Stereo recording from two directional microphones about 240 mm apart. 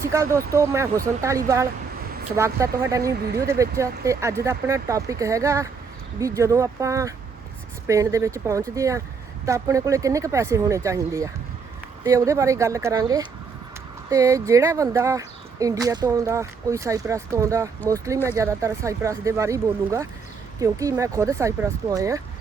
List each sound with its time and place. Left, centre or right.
0.1 s speech: centre
3.0 s speech: right
3.4 s speech: centre